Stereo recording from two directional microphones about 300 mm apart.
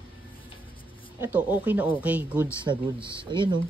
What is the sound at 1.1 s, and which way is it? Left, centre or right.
Speech, centre.